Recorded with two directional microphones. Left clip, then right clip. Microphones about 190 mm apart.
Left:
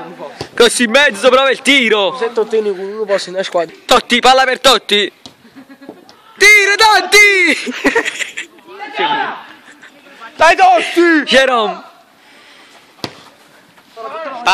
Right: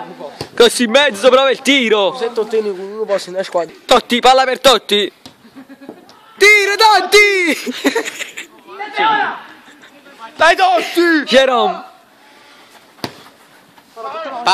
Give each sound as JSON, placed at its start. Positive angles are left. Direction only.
{"t": 0.6, "sound": "a man's voice", "side_deg": 0}
{"t": 2.1, "sound": "speech", "side_deg": 25}
{"t": 3.8, "sound": "a man's voice", "side_deg": -5}
{"t": 6.3, "sound": "a man's voice", "side_deg": -5}
{"t": 7.7, "sound": "a sound", "side_deg": 15}
{"t": 8.0, "sound": "speech", "side_deg": -5}
{"t": 10.4, "sound": "speech", "side_deg": 30}
{"t": 11.2, "sound": "a man's voice", "side_deg": -5}
{"t": 14.0, "sound": "a sound", "side_deg": -35}